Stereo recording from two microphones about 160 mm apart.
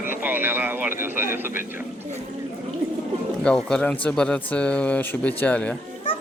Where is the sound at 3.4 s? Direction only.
5° left (ahead or behind).